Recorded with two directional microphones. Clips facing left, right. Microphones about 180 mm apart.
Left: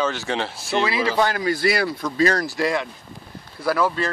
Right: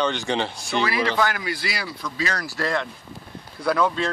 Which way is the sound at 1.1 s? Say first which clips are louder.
Left 3 dB; 30° left (ahead or behind).